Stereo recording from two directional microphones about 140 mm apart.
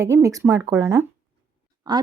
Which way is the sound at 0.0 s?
20° right (ahead or behind).